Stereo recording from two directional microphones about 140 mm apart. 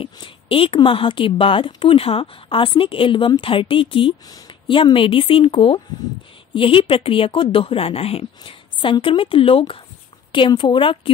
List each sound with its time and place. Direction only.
0.0 s a woman's voice: 40° left (ahead or behind)